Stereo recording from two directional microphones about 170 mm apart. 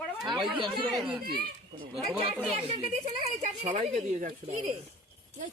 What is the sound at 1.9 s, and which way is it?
Speech, centre (ahead or behind).